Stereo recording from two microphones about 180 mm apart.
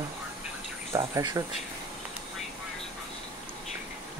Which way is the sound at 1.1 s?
20° right (ahead or behind).